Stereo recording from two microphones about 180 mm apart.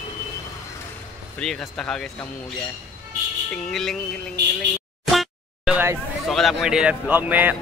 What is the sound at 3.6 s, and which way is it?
Speech, 5° left (ahead or behind).